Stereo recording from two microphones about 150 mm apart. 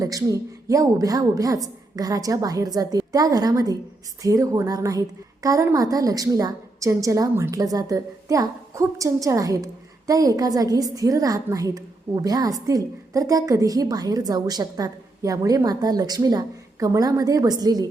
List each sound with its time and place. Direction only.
0.0 s a woman's voice: 20° right (ahead or behind)